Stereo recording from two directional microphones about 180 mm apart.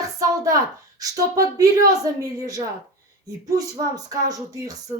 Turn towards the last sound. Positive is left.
turn(degrees=-20)  # may be behind; listen again after turning